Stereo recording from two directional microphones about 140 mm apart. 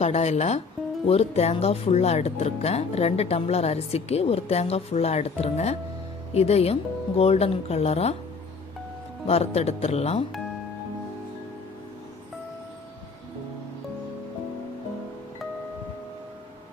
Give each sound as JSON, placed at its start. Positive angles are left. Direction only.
{"t": 0.0, "sound": "speech", "side_deg": 50}
{"t": 9.2, "sound": "speech", "side_deg": 45}